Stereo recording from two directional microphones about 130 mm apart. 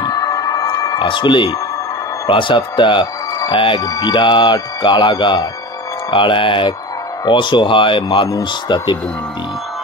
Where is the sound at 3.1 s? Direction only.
25° left (ahead or behind).